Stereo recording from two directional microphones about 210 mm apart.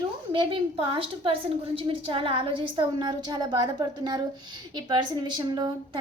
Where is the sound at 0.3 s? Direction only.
25° right (ahead or behind).